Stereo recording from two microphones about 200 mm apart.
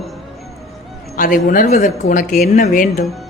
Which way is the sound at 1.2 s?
45° left (ahead or behind).